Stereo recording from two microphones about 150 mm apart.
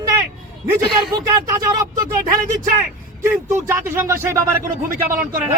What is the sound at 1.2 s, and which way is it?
Speech, 25° right (ahead or behind).